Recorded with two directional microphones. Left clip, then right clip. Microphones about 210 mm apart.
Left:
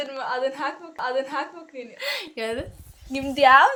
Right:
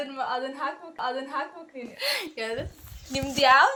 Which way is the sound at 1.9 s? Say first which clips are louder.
Right 1 dB; 30° right (ahead or behind).